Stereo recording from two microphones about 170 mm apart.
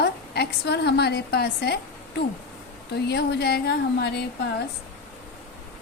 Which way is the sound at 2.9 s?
75° left (ahead or behind).